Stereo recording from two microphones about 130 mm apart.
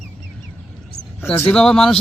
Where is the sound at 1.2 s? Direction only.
15° left (ahead or behind).